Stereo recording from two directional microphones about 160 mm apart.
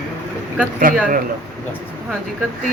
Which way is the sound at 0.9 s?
60° right (ahead or behind).